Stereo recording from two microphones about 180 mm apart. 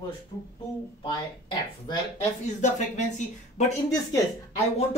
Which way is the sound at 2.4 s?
40° left (ahead or behind).